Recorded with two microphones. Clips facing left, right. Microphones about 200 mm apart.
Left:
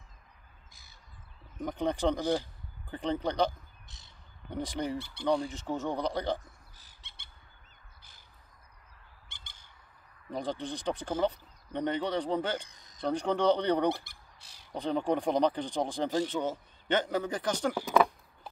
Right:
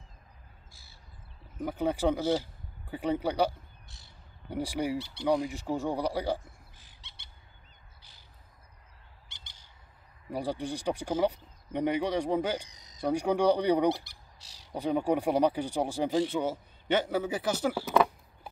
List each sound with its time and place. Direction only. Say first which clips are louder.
1.6 s speech: right 1 dB; 5° right (ahead or behind)
3.9 s a sound: right 1 dB; 20° left (ahead or behind)
4.5 s speech: right 3 dB; 10° right (ahead or behind)
4.9 s speech: right 3 dB; 50° left (ahead or behind)
5.5 s speech: right 2 dB; 10° right (ahead or behind)
6.8 s squawk: right 1 dB; 45° left (ahead or behind)
9.3 s squawk: left 1 dB; 50° left (ahead or behind)
10.3 s speech: right 2 dB; 10° right (ahead or behind)
12.6 s crow: right 2 dB; 55° left (ahead or behind)
13.0 s speech: right 2 dB; 10° right (ahead or behind)
13.9 s squawk: right 1 dB; 55° left (ahead or behind)
14.7 s speech: right 2 dB; 10° right (ahead or behind)
17.9 s a sound: left 1 dB; 5° right (ahead or behind)